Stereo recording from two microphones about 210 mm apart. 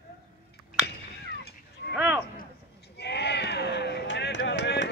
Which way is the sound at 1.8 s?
50° left (ahead or behind).